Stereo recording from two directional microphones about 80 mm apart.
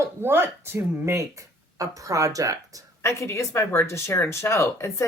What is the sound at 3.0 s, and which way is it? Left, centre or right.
Speech, left.